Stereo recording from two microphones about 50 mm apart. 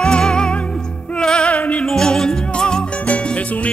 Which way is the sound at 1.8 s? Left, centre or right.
Centre.